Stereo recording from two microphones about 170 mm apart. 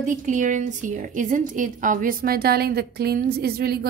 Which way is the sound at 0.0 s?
50° right (ahead or behind).